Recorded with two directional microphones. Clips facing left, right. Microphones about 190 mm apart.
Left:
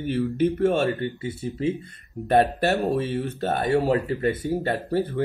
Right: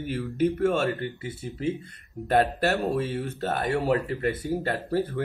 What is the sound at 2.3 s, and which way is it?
Speech, 15° left (ahead or behind).